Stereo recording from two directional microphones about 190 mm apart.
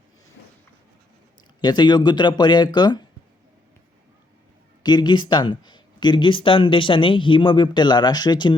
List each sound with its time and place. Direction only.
1.6 s speech: 25° left (ahead or behind)
4.8 s speech: 20° left (ahead or behind)